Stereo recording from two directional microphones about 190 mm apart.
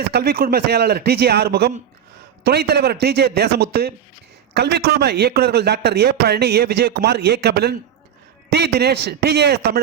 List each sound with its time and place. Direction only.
0.1 s a man's voice: 55° right (ahead or behind)